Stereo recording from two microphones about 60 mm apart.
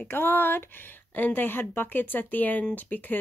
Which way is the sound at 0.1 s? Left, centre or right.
Left.